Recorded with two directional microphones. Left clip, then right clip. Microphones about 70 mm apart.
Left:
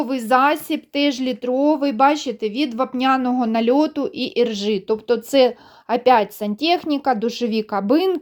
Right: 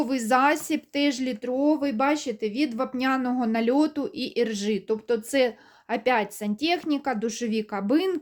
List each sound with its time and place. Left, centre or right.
0.0 s a woman's voice: centre
1.0 s speech: centre
1.6 s speech: left